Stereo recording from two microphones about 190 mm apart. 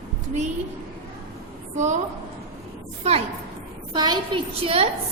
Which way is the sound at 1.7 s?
40° right (ahead or behind).